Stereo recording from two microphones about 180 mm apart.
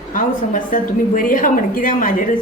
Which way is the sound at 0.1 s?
45° left (ahead or behind).